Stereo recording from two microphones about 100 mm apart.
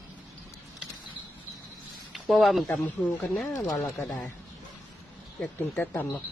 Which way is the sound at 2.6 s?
15° left (ahead or behind).